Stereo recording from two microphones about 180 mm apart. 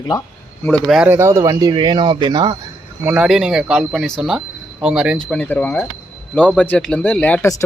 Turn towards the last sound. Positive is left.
turn(degrees=10)  # may be behind; listen again after turning